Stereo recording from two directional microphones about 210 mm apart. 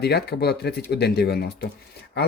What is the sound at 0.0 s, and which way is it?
Speech, 50° left (ahead or behind).